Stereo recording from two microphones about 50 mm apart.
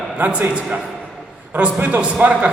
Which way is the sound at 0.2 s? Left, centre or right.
Right.